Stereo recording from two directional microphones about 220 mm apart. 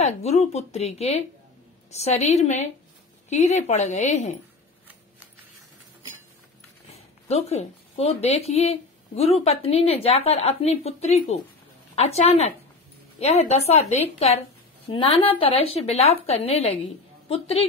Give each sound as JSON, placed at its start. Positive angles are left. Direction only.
{"t": 0.0, "sound": "speech", "side_deg": 30}
{"t": 7.2, "sound": "speech", "side_deg": 30}